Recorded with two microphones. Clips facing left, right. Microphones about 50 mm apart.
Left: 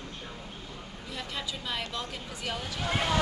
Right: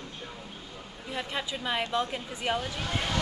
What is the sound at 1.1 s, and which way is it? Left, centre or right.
Speech, right.